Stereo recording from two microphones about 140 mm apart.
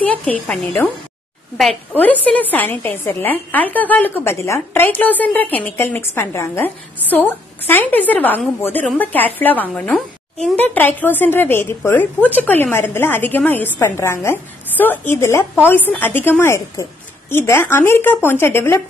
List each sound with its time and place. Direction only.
0.0 s a woman's voice: 10° left (ahead or behind)
1.6 s a woman's voice: 5° left (ahead or behind)